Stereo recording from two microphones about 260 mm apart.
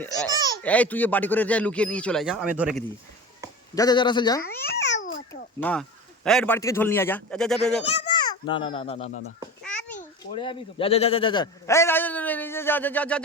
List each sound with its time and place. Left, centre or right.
0.0 s a man's voice: centre
3.8 s a man's voice: centre
4.6 s babbling: left
6.2 s a man's voice: centre
7.9 s a child's voice: centre
9.6 s a sound: centre
10.0 s speech: centre